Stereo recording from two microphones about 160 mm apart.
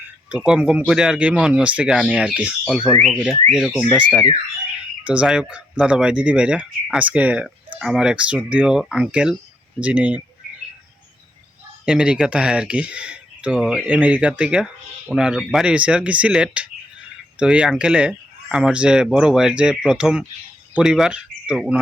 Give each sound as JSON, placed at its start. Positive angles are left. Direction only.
{"t": 0.3, "sound": "speech", "side_deg": -5}
{"t": 11.9, "sound": "speech", "side_deg": -5}